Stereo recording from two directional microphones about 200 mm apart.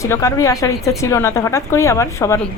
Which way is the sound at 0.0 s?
15° left (ahead or behind).